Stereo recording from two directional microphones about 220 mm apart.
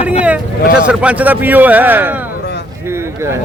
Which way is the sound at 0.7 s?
5° right (ahead or behind).